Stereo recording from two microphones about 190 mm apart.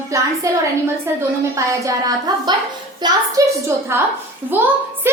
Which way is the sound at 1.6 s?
15° right (ahead or behind).